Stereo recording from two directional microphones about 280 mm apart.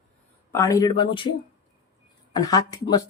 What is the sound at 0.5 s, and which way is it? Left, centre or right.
Speech, centre.